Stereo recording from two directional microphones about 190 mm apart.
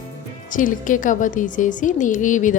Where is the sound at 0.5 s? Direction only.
45° left (ahead or behind).